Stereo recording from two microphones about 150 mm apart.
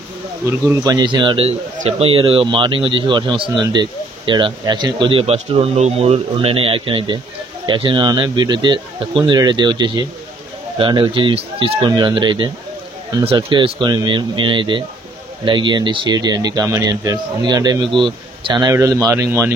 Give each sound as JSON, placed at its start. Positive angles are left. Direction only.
{"t": 0.5, "sound": "speech", "side_deg": -15}
{"t": 0.9, "sound": "speech", "side_deg": -30}